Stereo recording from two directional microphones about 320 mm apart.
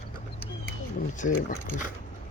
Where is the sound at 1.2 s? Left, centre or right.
Left.